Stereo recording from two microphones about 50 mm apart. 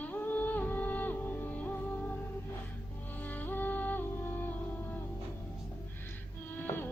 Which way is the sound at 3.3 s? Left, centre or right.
Left.